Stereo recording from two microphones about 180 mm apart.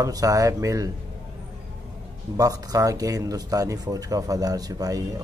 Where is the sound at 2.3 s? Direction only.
20° right (ahead or behind).